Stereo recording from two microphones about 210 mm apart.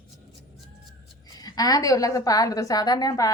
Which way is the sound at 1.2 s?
20° left (ahead or behind).